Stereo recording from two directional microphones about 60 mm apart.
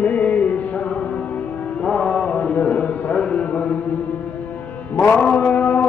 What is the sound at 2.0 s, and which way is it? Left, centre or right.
Mantra, centre.